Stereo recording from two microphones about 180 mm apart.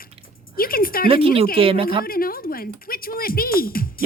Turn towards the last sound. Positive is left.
turn(degrees=55)  # may be behind; listen again after turning